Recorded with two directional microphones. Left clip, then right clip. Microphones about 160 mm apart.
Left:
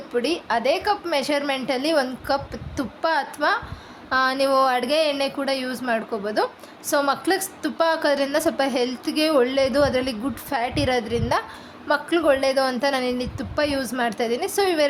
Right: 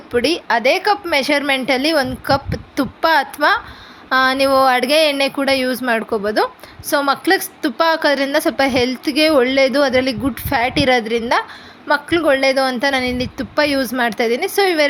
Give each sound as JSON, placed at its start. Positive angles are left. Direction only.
{"t": 0.1, "sound": "a woman's voice", "side_deg": -30}